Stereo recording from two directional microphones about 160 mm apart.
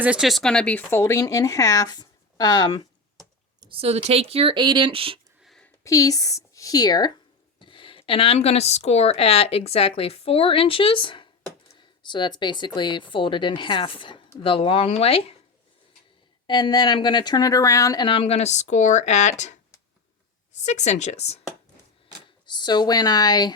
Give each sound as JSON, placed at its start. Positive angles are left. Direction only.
{"t": 0.0, "sound": "speech", "side_deg": -5}
{"t": 3.6, "sound": "speech", "side_deg": -35}
{"t": 5.4, "sound": "a sound", "side_deg": 0}
{"t": 5.8, "sound": "a woman's voice", "side_deg": 20}
{"t": 16.5, "sound": "speech", "side_deg": 25}
{"t": 20.6, "sound": "speech", "side_deg": 45}
{"t": 22.4, "sound": "speech", "side_deg": 25}